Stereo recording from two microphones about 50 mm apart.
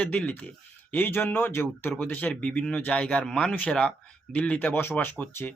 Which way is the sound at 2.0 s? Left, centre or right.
Left.